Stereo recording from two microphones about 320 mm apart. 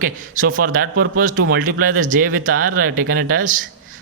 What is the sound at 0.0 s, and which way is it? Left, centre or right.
Speech, right.